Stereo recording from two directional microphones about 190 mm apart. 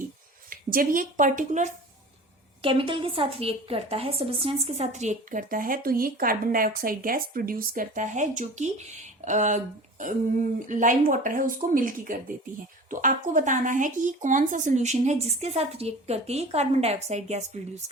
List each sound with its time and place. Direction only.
0.5 s a woman's voice: 45° right (ahead or behind)
2.6 s speech: 25° right (ahead or behind)
10.7 s speech: 45° right (ahead or behind)